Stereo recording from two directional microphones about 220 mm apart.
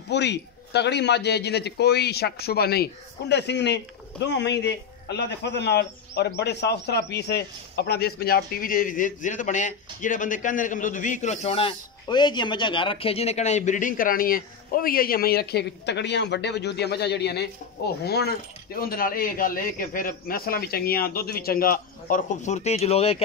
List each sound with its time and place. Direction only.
0.1 s a man's voice: 50° left (ahead or behind); by 23.2 s 30° left (ahead or behind)